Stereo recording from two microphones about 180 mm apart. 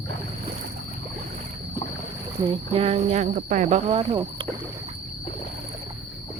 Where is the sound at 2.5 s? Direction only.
30° right (ahead or behind).